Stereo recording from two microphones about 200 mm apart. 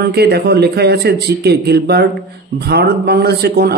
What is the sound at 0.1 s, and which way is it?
A man's voice, 55° right (ahead or behind).